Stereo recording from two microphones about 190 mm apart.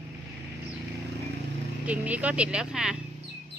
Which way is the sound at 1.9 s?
5° right (ahead or behind).